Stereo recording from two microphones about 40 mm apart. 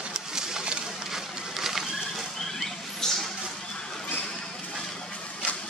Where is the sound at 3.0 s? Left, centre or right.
Centre.